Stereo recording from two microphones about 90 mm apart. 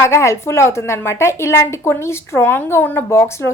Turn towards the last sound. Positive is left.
turn(degrees=30)  # may be behind; listen again after turning